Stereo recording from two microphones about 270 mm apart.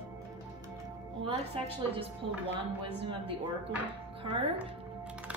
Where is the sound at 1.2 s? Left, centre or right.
Centre.